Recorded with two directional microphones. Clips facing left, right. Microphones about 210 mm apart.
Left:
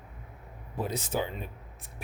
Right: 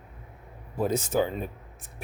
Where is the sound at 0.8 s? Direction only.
45° right (ahead or behind).